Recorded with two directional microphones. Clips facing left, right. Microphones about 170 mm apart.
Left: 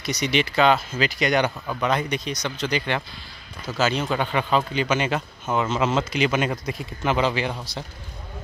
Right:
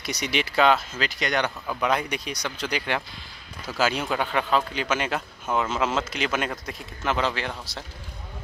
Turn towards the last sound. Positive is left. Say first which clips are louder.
# left 5 dB
turn(degrees=0)  # may be behind; listen again after turning